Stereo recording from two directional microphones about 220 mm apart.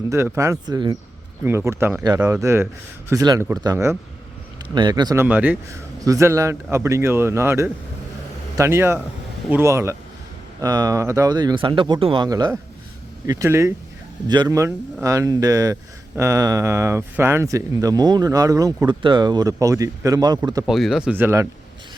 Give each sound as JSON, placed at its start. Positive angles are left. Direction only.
{"t": 0.1, "sound": "speech", "side_deg": -15}
{"t": 20.7, "sound": "speech", "side_deg": 0}